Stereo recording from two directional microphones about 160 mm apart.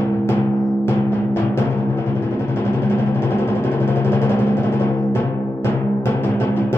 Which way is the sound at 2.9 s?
15° left (ahead or behind).